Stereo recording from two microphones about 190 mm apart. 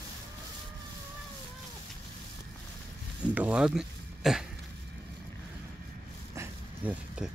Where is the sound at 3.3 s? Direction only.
5° right (ahead or behind).